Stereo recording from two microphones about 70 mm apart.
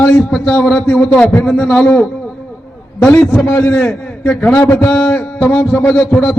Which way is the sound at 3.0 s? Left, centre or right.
Left.